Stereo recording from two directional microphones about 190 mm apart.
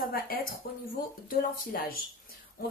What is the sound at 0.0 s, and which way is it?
A woman's voice, 50° left (ahead or behind).